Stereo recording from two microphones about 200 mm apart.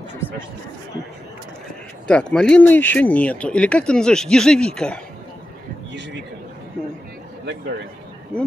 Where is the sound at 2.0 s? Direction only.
5° left (ahead or behind).